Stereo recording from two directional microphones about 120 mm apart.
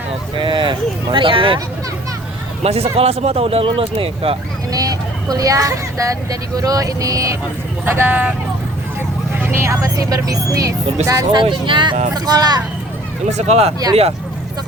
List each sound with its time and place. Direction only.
0.3 s speech: 45° right (ahead or behind)
2.6 s speech: 55° right (ahead or behind)
4.7 s speech: 30° right (ahead or behind)
7.9 s speech: 15° right (ahead or behind)
9.4 s speech: 20° right (ahead or behind)
13.3 s speech: 60° right (ahead or behind)